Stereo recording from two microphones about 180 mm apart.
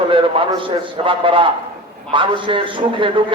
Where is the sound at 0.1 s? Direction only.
30° right (ahead or behind).